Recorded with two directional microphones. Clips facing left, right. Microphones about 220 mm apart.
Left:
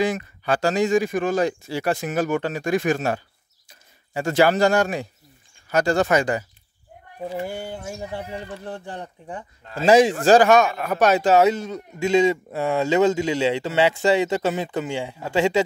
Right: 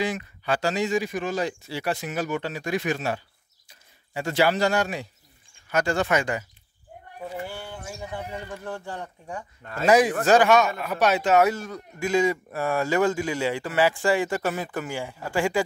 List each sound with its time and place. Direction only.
0.0 s speech: 45° left (ahead or behind)
7.6 s speech: 35° left (ahead or behind)
8.5 s a man's voice: 20° left (ahead or behind)
10.5 s speech: 50° left (ahead or behind)
11.3 s a man's voice: 20° left (ahead or behind)